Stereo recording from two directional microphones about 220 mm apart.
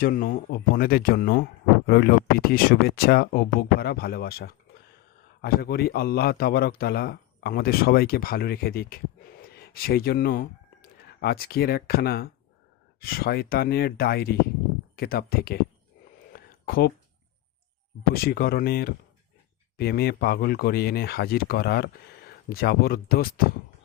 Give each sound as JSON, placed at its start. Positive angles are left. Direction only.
{"t": 0.0, "sound": "a man's voice", "side_deg": 40}
{"t": 16.3, "sound": "a sound", "side_deg": 40}
{"t": 18.1, "sound": "a man's voice", "side_deg": 45}